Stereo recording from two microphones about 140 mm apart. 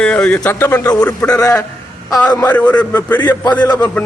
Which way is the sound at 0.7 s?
25° left (ahead or behind).